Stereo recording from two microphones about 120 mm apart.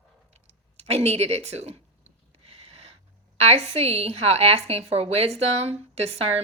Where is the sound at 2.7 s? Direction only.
60° right (ahead or behind).